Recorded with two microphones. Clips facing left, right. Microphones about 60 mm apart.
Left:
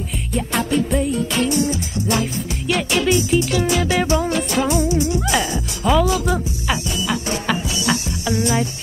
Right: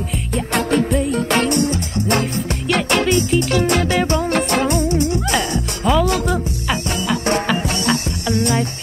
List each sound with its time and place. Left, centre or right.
0.3 s music: right
3.3 s music: centre
3.6 s music: right
5.2 s music: centre
8.3 s music: centre